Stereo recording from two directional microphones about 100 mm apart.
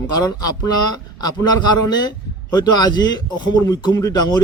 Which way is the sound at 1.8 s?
45° left (ahead or behind).